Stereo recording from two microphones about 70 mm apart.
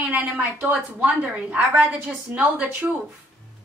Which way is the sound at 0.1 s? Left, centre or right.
Right.